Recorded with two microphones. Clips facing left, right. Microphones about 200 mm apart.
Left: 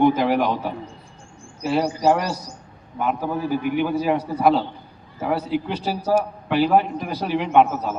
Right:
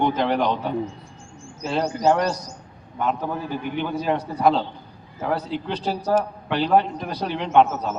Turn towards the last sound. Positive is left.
turn(degrees=10)  # may be behind; listen again after turning